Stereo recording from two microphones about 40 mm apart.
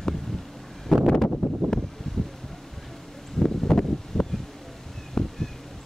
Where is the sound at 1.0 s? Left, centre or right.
Centre.